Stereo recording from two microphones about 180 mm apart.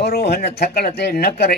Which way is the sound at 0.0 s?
65° left (ahead or behind).